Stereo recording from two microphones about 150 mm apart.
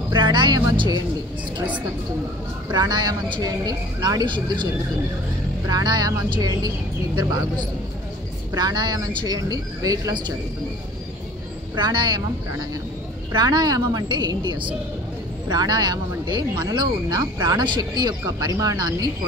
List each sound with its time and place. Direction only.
0.1 s speech: 30° right (ahead or behind)
2.7 s speech: 25° right (ahead or behind)
5.7 s speech: 25° right (ahead or behind)
11.7 s speech: 30° right (ahead or behind)